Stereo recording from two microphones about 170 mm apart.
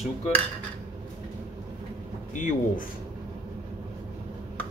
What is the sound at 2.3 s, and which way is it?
Speech, 45° left (ahead or behind).